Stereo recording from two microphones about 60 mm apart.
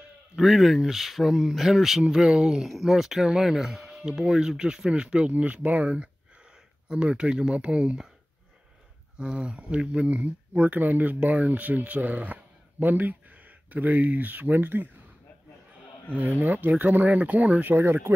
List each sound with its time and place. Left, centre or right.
0.4 s speech: centre
9.2 s speech: centre; by 14.9 s right
16.2 s speech: right
17.7 s speech: right